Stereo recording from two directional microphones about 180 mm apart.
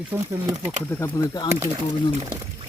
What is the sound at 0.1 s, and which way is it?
Speech, 10° right (ahead or behind).